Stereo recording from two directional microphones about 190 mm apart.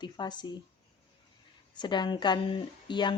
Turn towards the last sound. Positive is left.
turn(degrees=25)  # may be behind; listen again after turning